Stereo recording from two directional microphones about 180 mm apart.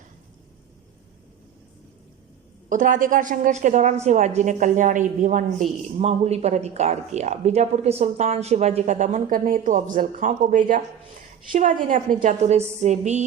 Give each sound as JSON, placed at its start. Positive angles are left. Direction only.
{"t": 2.6, "sound": "a woman's voice", "side_deg": -45}